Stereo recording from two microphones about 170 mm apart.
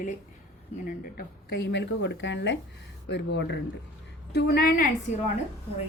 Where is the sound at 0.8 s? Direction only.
60° left (ahead or behind); by 3.5 s 90° left.